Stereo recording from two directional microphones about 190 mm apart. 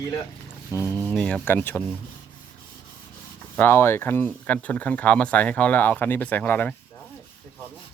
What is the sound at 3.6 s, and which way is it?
Speech, 10° left (ahead or behind).